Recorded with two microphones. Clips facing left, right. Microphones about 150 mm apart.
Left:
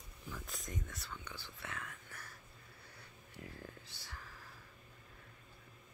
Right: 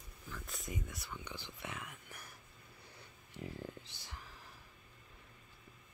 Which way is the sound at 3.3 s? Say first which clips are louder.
Right 5 dB; 20° right (ahead or behind).